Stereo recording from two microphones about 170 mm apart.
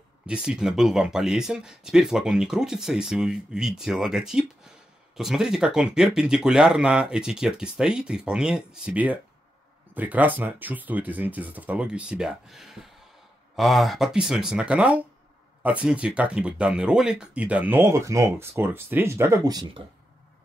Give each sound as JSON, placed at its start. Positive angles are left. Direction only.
{"t": 0.3, "sound": "speech", "side_deg": -5}